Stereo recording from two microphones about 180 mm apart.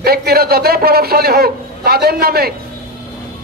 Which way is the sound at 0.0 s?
60° right (ahead or behind).